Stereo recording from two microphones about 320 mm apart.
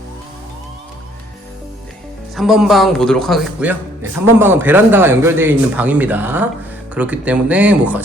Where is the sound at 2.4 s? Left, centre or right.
Centre.